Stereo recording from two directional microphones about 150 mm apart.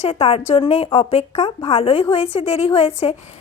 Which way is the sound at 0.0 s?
40° left (ahead or behind).